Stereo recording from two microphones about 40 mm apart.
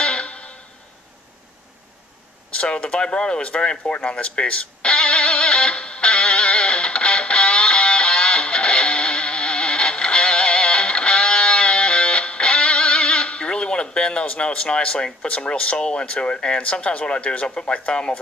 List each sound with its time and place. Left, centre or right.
0.0 s music: left
2.6 s speech: left
3.7 s music: left
14.4 s speech: left